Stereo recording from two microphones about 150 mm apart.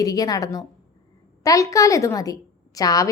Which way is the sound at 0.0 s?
25° left (ahead or behind).